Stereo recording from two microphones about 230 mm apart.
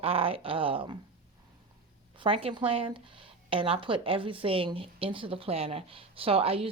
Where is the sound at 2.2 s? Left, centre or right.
Right.